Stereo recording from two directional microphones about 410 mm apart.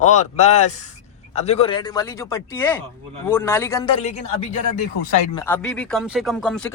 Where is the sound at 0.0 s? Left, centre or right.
Centre.